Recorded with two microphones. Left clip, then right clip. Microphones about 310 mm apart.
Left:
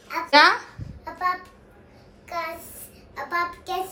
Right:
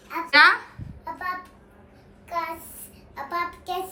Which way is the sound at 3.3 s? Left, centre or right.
Centre.